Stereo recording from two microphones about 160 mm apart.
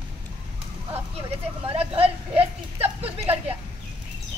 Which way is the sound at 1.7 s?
35° right (ahead or behind).